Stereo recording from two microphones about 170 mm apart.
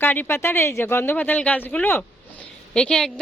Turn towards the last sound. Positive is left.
turn(degrees=5)  # may be behind; listen again after turning